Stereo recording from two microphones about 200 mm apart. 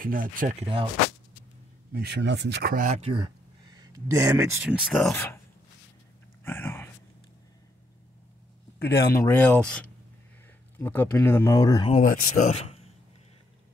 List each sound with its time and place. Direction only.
0.0 s speech: 45° right (ahead or behind)
1.9 s speech: 50° right (ahead or behind); by 4.6 s 15° right (ahead or behind)
4.6 s speech: centre (ahead or behind)
5.1 s speech: 10° left (ahead or behind)
6.4 s a sound: 10° left (ahead or behind)
8.7 s a sound: 55° left (ahead or behind)
9.0 s speech: 15° left (ahead or behind)
12.0 s speech: 40° left (ahead or behind)